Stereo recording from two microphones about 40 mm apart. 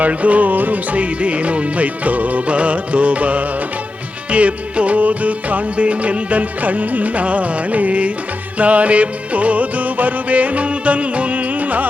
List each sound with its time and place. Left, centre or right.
0.0 s music: right